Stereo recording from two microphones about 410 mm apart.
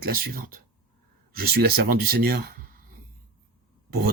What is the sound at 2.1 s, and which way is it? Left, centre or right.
Speech, right.